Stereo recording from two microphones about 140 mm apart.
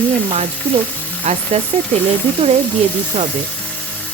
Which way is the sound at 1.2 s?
55° right (ahead or behind).